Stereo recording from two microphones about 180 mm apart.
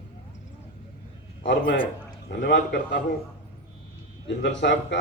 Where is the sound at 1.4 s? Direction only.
75° left (ahead or behind).